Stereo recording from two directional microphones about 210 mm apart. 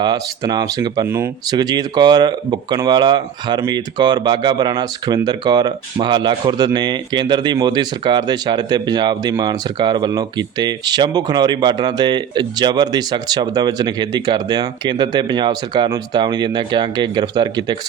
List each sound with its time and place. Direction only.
0.0 s speech: 20° right (ahead or behind)